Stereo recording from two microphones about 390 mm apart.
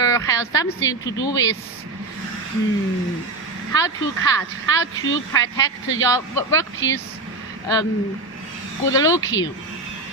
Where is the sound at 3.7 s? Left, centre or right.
Centre.